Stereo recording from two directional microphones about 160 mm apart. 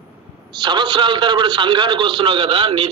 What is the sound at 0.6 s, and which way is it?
A man's voice, 30° right (ahead or behind).